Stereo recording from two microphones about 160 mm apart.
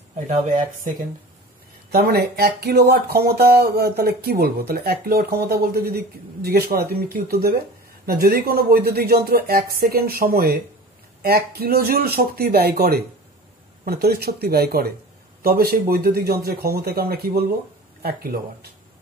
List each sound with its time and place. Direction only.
1.9 s speech: 75° right (ahead or behind)